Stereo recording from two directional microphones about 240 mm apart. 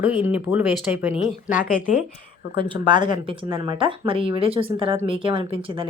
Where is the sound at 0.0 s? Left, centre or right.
Centre.